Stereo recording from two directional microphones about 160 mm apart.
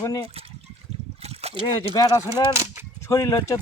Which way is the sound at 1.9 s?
20° left (ahead or behind).